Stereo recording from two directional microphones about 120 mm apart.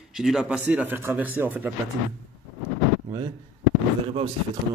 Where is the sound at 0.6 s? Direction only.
15° right (ahead or behind).